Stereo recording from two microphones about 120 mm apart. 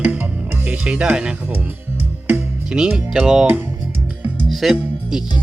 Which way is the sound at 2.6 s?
5° right (ahead or behind).